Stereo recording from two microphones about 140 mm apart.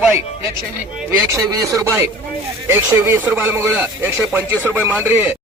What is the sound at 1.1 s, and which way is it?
Speech, 20° right (ahead or behind).